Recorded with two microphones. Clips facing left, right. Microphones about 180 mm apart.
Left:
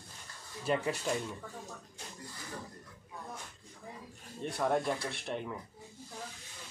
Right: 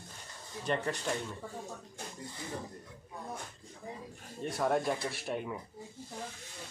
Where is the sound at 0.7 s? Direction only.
5° left (ahead or behind).